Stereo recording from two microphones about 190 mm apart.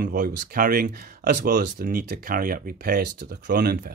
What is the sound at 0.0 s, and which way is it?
Speech, 45° right (ahead or behind).